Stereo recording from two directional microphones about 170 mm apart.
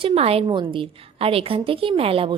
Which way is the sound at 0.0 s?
35° right (ahead or behind).